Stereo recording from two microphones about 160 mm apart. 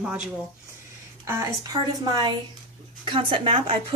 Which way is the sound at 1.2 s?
25° right (ahead or behind).